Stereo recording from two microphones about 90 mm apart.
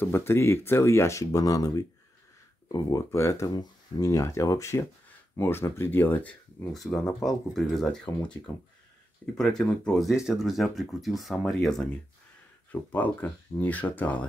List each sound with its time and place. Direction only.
0.0 s speech: 25° left (ahead or behind)
3.4 s speech: 50° left (ahead or behind); by 6.3 s 20° left (ahead or behind)
6.7 s speech: 5° left (ahead or behind)
8.5 s speech: 35° left (ahead or behind)
9.2 s speech: 5° left (ahead or behind)
9.9 s speech: 5° right (ahead or behind)
12.9 s speech: 20° left (ahead or behind)